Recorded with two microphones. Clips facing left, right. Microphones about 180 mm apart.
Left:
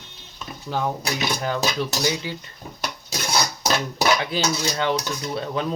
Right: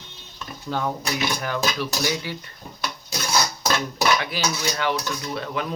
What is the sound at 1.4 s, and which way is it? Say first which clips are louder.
Cutlery: left 2 dB; 25° left (ahead or behind).